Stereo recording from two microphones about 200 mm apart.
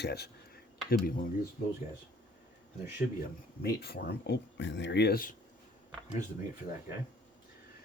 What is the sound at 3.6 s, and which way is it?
Speech, 55° left (ahead or behind).